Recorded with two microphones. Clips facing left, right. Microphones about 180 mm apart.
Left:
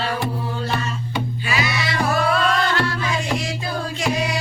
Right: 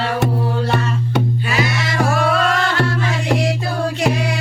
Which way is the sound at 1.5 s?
50° right (ahead or behind).